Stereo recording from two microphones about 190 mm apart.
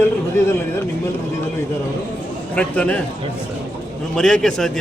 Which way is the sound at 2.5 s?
5° left (ahead or behind).